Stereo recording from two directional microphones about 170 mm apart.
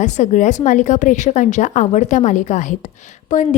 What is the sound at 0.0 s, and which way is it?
A woman's voice, 45° left (ahead or behind).